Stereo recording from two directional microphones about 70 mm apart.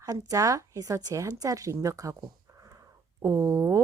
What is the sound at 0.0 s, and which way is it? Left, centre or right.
Speech, right.